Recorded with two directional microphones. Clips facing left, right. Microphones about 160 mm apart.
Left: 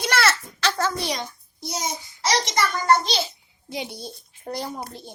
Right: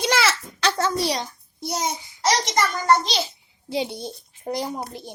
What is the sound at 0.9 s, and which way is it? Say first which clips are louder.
Speech: right 4 dB; 35° right (ahead or behind).